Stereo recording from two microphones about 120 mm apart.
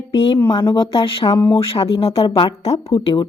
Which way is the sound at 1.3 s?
40° left (ahead or behind).